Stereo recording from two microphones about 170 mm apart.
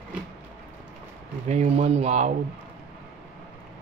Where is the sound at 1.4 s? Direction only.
40° right (ahead or behind).